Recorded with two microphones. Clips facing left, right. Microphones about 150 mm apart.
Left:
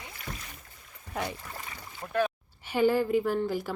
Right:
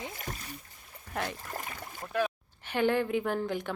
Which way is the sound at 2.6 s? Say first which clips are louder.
Left 3 dB; 5° left (ahead or behind).